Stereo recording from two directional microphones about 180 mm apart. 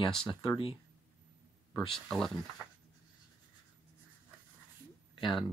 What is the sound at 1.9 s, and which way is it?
Speech, centre (ahead or behind).